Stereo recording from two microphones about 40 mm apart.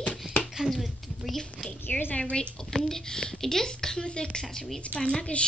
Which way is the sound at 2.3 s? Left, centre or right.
Left.